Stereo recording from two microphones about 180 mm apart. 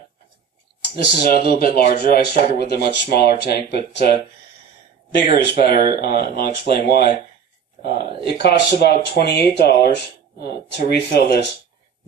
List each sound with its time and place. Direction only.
0.8 s speech: 60° left (ahead or behind)
5.3 s speech: 60° left (ahead or behind)